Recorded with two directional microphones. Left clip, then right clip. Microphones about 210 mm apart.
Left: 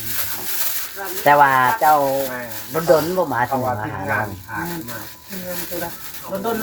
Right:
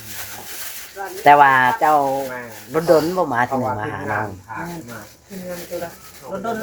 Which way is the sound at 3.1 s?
45° right (ahead or behind).